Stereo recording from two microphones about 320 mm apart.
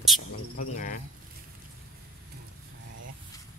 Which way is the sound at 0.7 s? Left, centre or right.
Left.